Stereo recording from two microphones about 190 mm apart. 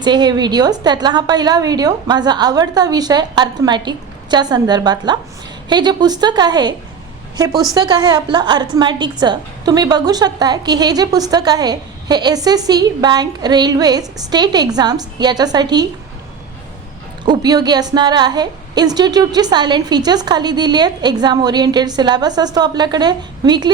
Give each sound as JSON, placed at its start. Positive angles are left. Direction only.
{"t": 0.0, "sound": "a woman's voice", "side_deg": -25}
{"t": 17.2, "sound": "a woman's voice", "side_deg": -20}